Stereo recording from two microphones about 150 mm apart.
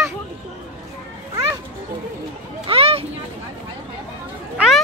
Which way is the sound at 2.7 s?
40° right (ahead or behind).